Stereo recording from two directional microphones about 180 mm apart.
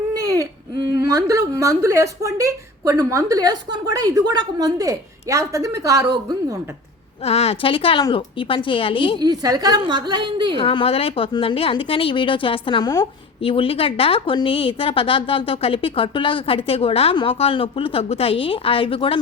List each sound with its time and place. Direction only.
0.1 s a woman's voice: 20° right (ahead or behind)
7.3 s speech: 35° left (ahead or behind)
9.1 s a woman's voice: 25° right (ahead or behind)
10.6 s speech: 30° left (ahead or behind)
13.4 s a woman's voice: 30° left (ahead or behind)